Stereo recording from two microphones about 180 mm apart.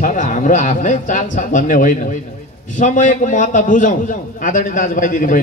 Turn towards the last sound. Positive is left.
turn(degrees=50)  # may be behind; listen again after turning